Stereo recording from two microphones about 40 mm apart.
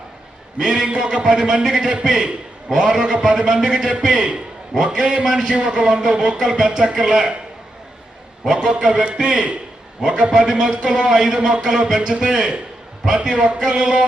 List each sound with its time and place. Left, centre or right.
0.6 s a man's voice: right
8.5 s a man's voice: right
11.6 s a man's voice: centre